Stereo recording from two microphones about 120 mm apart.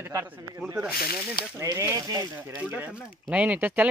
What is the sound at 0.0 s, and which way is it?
Speech, 20° right (ahead or behind).